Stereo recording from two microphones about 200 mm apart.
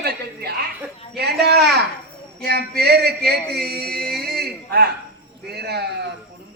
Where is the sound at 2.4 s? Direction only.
55° right (ahead or behind).